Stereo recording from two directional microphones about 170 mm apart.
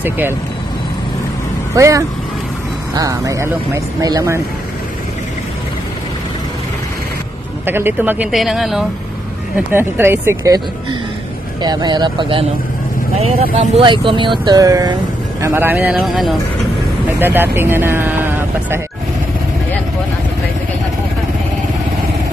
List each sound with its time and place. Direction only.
1.8 s speech: 20° right (ahead or behind)
7.6 s speech: 15° right (ahead or behind)
8.3 s speech: centre (ahead or behind)
9.7 s speech: 15° right (ahead or behind)
17.2 s speech: 10° right (ahead or behind)